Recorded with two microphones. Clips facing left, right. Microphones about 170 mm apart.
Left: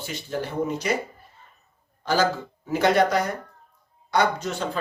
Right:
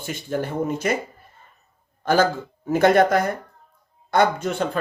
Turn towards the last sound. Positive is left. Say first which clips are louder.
# right 4 dB
turn(degrees=-55)  # may be behind; listen again after turning